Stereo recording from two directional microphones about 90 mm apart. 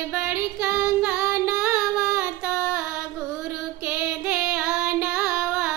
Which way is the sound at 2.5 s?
15° right (ahead or behind).